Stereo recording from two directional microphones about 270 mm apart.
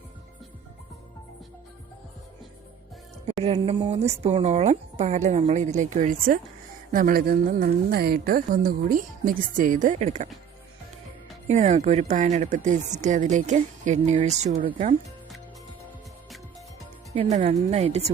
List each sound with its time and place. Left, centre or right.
3.4 s a woman's voice: centre
11.4 s speech: right
17.1 s speech: right